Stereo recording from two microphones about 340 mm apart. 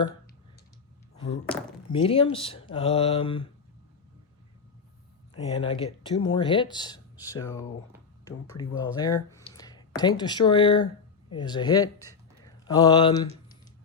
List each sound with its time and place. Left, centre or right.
1.1 s thunk: centre
1.9 s speech: centre
5.3 s speech: centre
12.0 s a sound: centre